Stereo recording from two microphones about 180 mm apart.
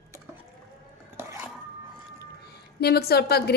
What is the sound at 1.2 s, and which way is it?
Dishes, 10° right (ahead or behind).